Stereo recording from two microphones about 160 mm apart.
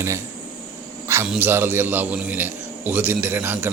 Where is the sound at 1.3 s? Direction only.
15° right (ahead or behind).